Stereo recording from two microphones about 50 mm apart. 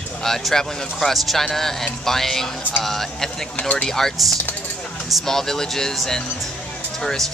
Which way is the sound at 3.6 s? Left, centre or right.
Centre.